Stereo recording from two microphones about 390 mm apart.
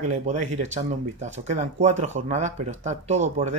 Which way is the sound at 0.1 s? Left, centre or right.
Centre.